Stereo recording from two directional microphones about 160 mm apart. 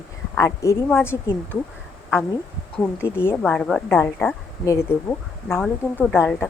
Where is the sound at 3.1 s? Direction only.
15° left (ahead or behind).